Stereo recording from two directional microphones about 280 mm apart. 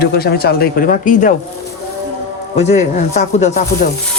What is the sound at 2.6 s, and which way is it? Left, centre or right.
Speech, left.